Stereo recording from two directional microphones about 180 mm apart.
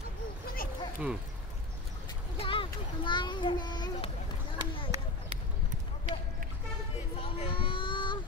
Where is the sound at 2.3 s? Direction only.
30° left (ahead or behind).